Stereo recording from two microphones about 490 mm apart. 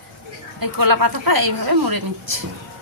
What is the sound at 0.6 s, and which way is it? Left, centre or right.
A woman's voice, right.